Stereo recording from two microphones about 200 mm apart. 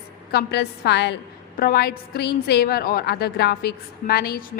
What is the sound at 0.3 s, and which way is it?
A woman's voice, 55° left (ahead or behind).